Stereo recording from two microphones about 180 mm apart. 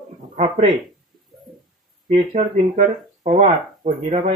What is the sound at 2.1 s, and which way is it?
Speech, 40° right (ahead or behind).